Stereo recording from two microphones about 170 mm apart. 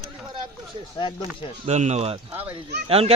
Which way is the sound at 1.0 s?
30° left (ahead or behind).